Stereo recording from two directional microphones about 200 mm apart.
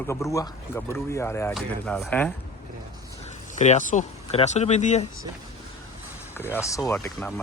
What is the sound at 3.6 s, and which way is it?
Speech, 35° left (ahead or behind).